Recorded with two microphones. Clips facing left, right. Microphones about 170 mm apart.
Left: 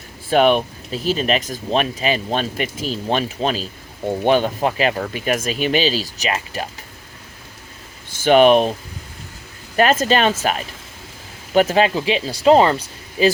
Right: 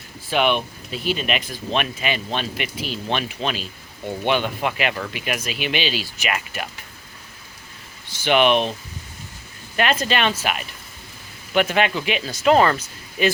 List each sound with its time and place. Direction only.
0.3 s speech: 40° left (ahead or behind)
8.1 s speech: 45° left (ahead or behind)
9.7 s speech: 40° left (ahead or behind)